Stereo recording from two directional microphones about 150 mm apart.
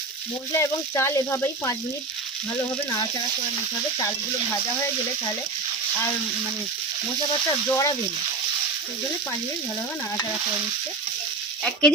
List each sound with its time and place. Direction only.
0.5 s speech: 15° left (ahead or behind)
7.7 s speech: 20° left (ahead or behind)
11.6 s speech: 5° left (ahead or behind)